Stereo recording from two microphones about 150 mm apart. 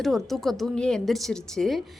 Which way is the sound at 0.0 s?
Centre (ahead or behind).